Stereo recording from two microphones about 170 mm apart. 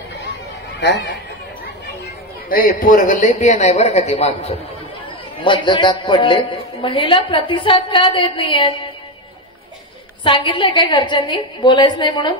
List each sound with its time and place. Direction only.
0.7 s speech: 90° left
2.5 s a man's voice: 55° left (ahead or behind); by 8.6 s 30° left (ahead or behind)
10.2 s a woman's voice: 30° left (ahead or behind)